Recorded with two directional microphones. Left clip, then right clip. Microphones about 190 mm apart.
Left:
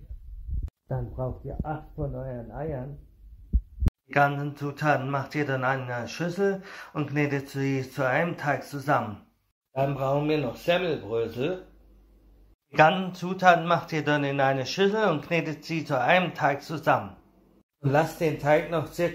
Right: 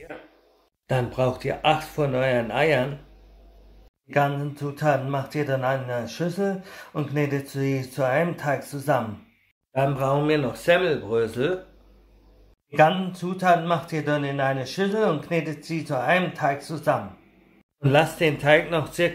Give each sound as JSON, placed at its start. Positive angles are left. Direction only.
{"t": 0.8, "sound": "speech", "side_deg": -35}
{"t": 4.1, "sound": "speech", "side_deg": 0}
{"t": 9.8, "sound": "speech", "side_deg": -15}
{"t": 13.0, "sound": "speech", "side_deg": 5}
{"t": 18.1, "sound": "speech", "side_deg": -10}